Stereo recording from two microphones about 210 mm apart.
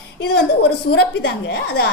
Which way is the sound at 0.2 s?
55° left (ahead or behind).